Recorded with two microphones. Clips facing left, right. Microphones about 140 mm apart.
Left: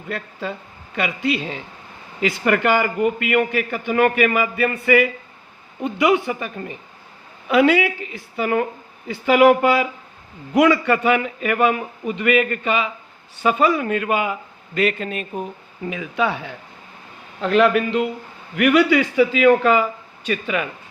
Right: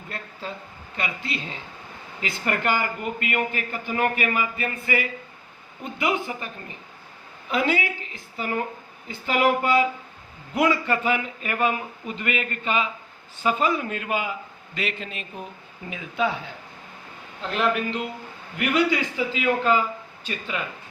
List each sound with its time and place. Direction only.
0.1 s a man's voice: 70° left (ahead or behind); by 15.3 s 50° left (ahead or behind)
15.9 s a man's voice: 85° left
17.4 s a man's voice: 70° left (ahead or behind)